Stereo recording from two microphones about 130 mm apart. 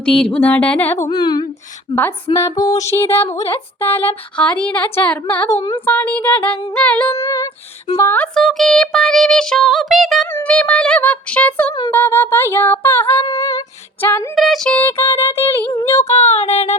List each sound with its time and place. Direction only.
0.0 s music: 5° left (ahead or behind)
0.4 s speech: 10° left (ahead or behind)
1.1 s speech: 35° left (ahead or behind)
2.3 s female singing: 30° left (ahead or behind)
3.3 s speech: 20° left (ahead or behind)
7.2 s female singing: 25° left (ahead or behind)
8.1 s music: 5° left (ahead or behind)
10.3 s speech: 10° left (ahead or behind)
13.2 s female singing: 25° left (ahead or behind)
14.3 s speech: centre (ahead or behind); by 15.7 s 15° left (ahead or behind)
15.7 s female singing: 25° left (ahead or behind)
16.0 s child singing: 55° left (ahead or behind)